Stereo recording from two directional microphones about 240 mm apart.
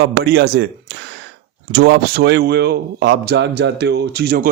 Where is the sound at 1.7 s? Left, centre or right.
Right.